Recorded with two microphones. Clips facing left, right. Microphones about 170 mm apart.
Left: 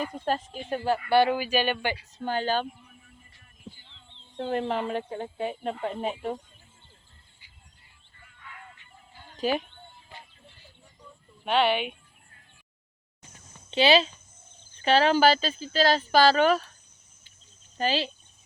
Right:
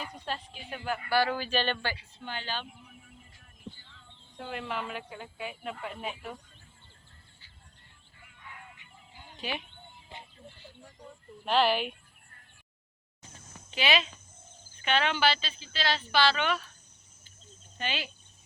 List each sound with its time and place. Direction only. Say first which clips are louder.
0.0 s a woman's voice: left 9 dB; 45° left (ahead or behind)
1.2 s speech: left 5 dB; 15° left (ahead or behind)
2.1 s a woman's voice: left 11 dB; 45° left (ahead or behind)
2.8 s a sound: right 2 dB; 5° right (ahead or behind)
3.8 s a sound: even; 20° left (ahead or behind)
4.4 s speech: left 8 dB; 40° left (ahead or behind)
8.2 s chicken: left 2 dB; 15° right (ahead or behind)
9.4 s speech: left 10 dB; 40° left (ahead or behind)
9.6 s music: left 1 dB; 20° right (ahead or behind)
11.4 s speech: left 2 dB; centre (ahead or behind)
13.7 s speech: left 8 dB; 30° left (ahead or behind)
17.7 s speech: left 9 dB; 35° left (ahead or behind)